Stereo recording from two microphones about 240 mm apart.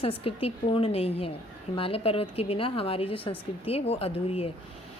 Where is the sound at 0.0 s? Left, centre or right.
Left.